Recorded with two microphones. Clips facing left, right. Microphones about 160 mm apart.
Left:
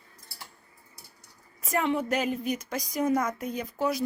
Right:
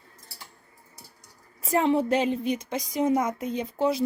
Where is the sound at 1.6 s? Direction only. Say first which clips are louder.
Right 5 dB; 30° right (ahead or behind).